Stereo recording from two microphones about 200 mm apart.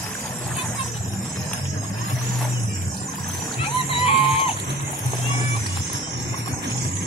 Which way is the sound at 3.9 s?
25° left (ahead or behind).